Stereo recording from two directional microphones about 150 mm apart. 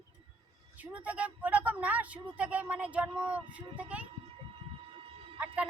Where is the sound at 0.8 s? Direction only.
10° right (ahead or behind).